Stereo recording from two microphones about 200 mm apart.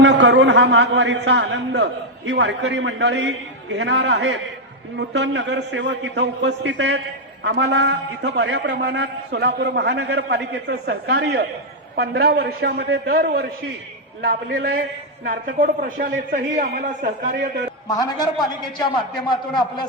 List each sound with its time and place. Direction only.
0.0 s a man's voice: 65° right (ahead or behind)
14.6 s a man's voice: 50° right (ahead or behind)
17.8 s a man's voice: 20° left (ahead or behind)
19.3 s a man's voice: 20° left (ahead or behind)